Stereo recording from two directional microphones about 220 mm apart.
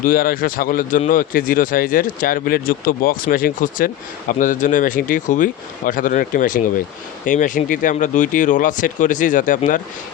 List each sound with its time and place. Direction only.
0.0 s speech: 40° left (ahead or behind)